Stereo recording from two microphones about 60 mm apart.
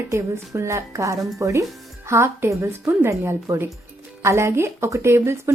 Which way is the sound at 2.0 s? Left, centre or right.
Right.